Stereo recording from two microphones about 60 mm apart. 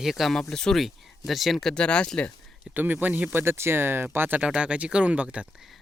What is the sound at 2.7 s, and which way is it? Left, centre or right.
Speech, right.